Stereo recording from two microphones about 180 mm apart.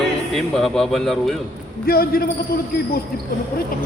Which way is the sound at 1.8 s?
55° left (ahead or behind).